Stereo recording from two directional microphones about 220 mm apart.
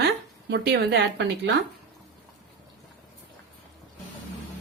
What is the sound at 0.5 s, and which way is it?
Speech, 45° right (ahead or behind).